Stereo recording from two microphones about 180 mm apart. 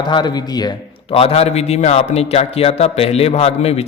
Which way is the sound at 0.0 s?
25° left (ahead or behind).